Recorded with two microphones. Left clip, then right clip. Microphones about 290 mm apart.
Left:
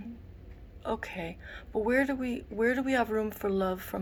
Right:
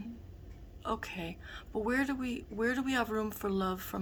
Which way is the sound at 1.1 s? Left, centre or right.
Right.